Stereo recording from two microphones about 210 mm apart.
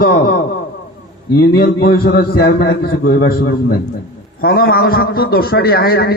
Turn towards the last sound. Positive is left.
turn(degrees=45)  # may be behind; listen again after turning